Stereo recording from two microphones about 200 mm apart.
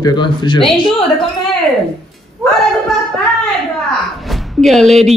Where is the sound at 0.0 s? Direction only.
20° left (ahead or behind).